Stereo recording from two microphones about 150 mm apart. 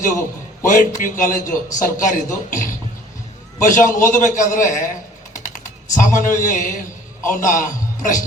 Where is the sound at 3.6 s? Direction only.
60° left (ahead or behind).